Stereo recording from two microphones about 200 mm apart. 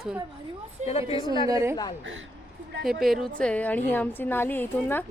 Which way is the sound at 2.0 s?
70° right (ahead or behind).